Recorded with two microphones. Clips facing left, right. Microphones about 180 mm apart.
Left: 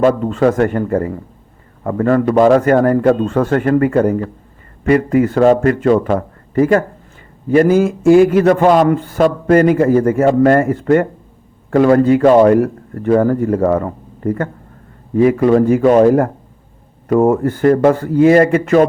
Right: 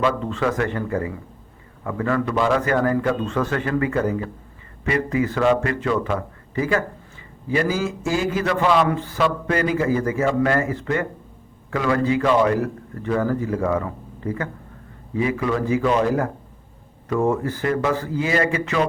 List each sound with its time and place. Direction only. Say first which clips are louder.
0.0 s a man's voice: left 9 dB; 45° left (ahead or behind)